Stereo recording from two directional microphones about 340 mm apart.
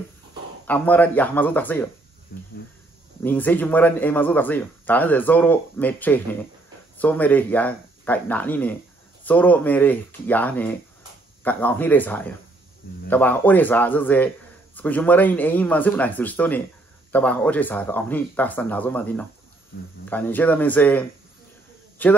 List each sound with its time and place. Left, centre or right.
0.7 s speech: centre
2.3 s a sound: left
3.3 s speech: centre
22.0 s speech: centre